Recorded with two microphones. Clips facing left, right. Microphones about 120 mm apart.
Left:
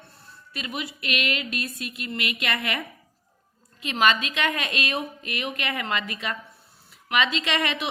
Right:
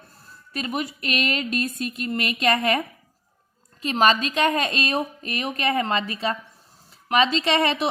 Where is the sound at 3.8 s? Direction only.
35° right (ahead or behind).